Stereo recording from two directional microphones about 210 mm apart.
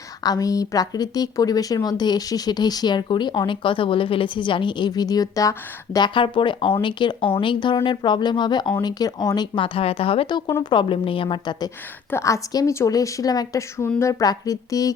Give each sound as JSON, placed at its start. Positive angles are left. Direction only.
{"t": 0.2, "sound": "a woman's voice", "side_deg": 20}